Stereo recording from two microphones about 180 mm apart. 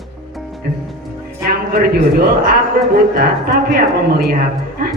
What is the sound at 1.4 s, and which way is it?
A man's voice, 60° right (ahead or behind).